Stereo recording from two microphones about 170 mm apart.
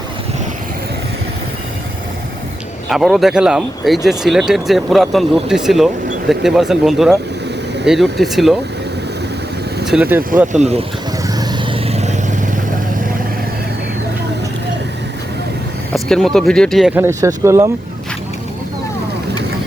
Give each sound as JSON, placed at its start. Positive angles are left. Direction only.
{"t": 2.9, "sound": "speech", "side_deg": 0}
{"t": 9.8, "sound": "speech", "side_deg": -5}
{"t": 10.3, "sound": "speech", "side_deg": -45}
{"t": 11.2, "sound": "vehicle", "side_deg": -25}
{"t": 15.9, "sound": "speech", "side_deg": 5}
{"t": 16.9, "sound": "speech", "side_deg": -15}